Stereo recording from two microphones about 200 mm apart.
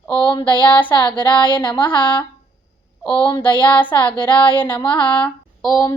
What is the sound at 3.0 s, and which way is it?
Speech, 10° left (ahead or behind).